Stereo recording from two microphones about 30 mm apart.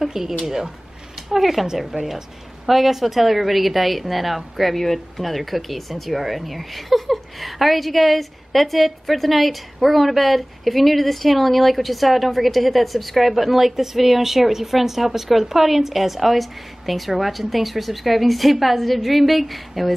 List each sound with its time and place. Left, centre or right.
0.0 s speech: centre
1.9 s speech: right
2.6 s speech: centre